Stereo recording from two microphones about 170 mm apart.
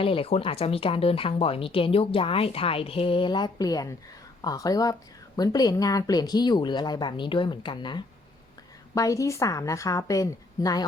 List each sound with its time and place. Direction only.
0.0 s speech: 30° left (ahead or behind)